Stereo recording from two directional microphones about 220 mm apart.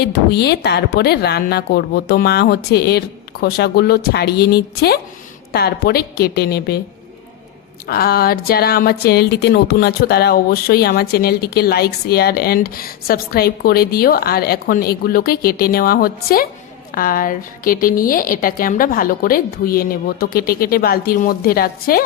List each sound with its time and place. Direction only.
0.0 s speech: 50° left (ahead or behind)
7.9 s a woman's voice: 45° left (ahead or behind)